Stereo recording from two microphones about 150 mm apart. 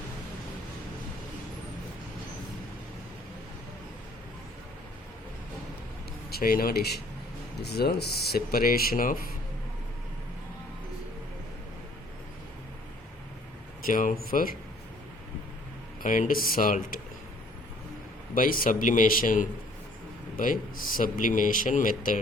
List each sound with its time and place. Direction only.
6.3 s speech: 75° left (ahead or behind)
13.8 s speech: 65° left (ahead or behind)
14.3 s speech: 75° left (ahead or behind)
16.0 s speech: 60° left (ahead or behind)
18.3 s speech: 70° left (ahead or behind)